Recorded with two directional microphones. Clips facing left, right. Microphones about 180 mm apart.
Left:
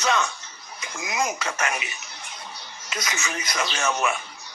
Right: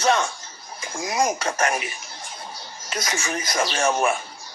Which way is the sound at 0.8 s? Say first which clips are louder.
Right 4 dB; 30° right (ahead or behind).